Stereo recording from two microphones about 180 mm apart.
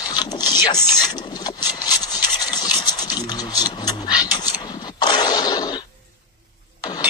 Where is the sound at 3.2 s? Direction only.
20° left (ahead or behind).